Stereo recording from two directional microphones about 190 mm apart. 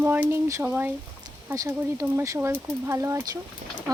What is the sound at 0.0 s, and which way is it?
Speech, 10° right (ahead or behind).